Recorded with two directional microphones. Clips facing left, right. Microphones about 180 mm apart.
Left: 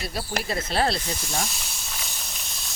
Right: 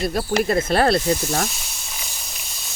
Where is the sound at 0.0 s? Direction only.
50° right (ahead or behind).